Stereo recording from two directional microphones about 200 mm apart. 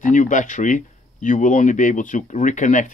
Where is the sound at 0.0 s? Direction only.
40° left (ahead or behind).